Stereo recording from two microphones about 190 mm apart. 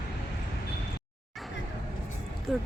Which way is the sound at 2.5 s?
Centre (ahead or behind).